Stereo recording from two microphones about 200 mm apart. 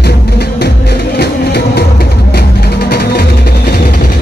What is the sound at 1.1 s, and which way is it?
Music, 55° left (ahead or behind).